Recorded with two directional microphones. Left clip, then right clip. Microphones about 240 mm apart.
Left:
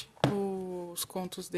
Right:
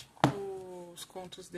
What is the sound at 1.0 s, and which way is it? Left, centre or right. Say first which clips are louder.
Speech: left 6 dB; left.